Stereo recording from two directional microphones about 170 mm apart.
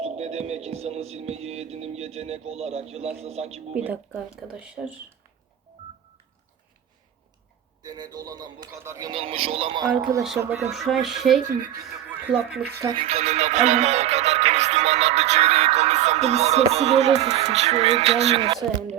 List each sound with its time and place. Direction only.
0.0 s music: 40° right (ahead or behind)
3.8 s speech: 5° right (ahead or behind)
7.8 s speech: 25° right (ahead or behind)
9.1 s music: 35° right (ahead or behind)
10.2 s speech: 10° right (ahead or behind)
12.8 s music: 30° right (ahead or behind)